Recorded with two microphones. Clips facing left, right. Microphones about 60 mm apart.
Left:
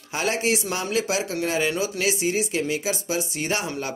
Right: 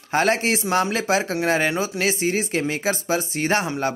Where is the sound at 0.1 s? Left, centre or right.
Right.